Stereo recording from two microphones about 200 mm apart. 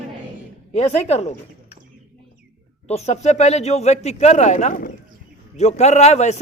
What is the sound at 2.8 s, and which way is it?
Speech, 30° left (ahead or behind).